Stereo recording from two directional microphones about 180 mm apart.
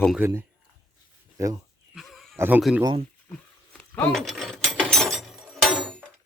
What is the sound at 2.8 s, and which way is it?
Speech, 25° right (ahead or behind).